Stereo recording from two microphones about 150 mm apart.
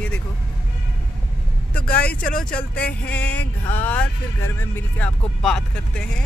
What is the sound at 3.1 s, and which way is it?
Music, 10° left (ahead or behind).